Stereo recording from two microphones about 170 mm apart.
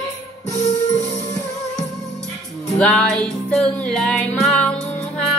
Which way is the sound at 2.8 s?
5° left (ahead or behind).